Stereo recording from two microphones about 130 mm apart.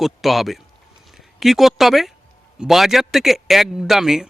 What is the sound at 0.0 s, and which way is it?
Speech, centre (ahead or behind).